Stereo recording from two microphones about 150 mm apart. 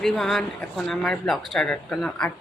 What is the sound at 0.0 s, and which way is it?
Speech, centre (ahead or behind).